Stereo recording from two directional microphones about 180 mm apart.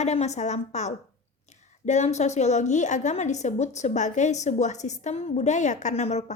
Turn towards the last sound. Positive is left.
turn(degrees=40)  # may be behind; listen again after turning